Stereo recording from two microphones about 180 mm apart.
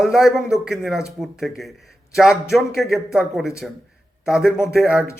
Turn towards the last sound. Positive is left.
turn(degrees=-5)  # may be behind; listen again after turning